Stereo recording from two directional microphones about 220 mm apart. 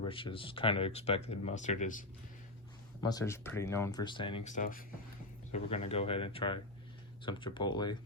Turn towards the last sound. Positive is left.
turn(degrees=20)  # may be behind; listen again after turning